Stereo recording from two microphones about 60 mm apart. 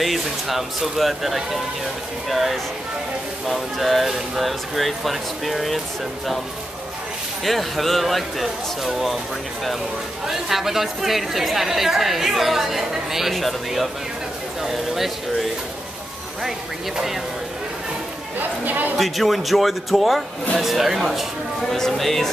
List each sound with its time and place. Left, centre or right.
0.0 s speech: centre
7.4 s speech: centre
10.2 s speech: centre
18.4 s chatter: right
18.9 s speech: centre
21.5 s speech: centre